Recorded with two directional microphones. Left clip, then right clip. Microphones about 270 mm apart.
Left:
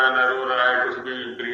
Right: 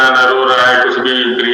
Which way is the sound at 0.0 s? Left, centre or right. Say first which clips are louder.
Right 10 dB; right.